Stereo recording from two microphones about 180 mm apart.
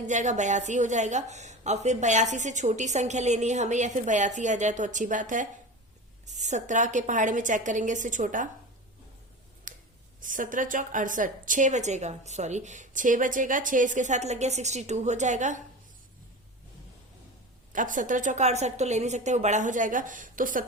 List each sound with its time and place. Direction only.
0.0 s a woman's voice: 40° right (ahead or behind)
9.7 s scissors: 50° right (ahead or behind)
10.2 s a woman's voice: 45° right (ahead or behind)
17.7 s a woman's voice: 45° right (ahead or behind)